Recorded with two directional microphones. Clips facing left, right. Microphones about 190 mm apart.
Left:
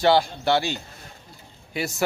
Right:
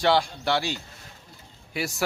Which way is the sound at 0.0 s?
Centre (ahead or behind).